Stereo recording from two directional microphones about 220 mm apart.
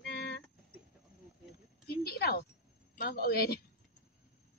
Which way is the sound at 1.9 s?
45° left (ahead or behind).